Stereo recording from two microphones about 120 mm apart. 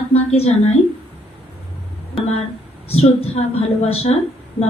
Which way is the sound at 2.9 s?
55° left (ahead or behind).